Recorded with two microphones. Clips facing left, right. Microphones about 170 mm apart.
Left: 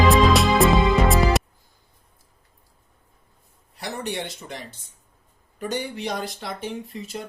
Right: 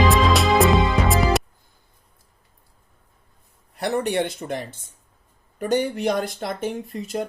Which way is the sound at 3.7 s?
55° right (ahead or behind).